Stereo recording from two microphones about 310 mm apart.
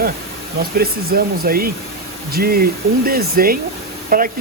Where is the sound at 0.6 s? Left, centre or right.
Right.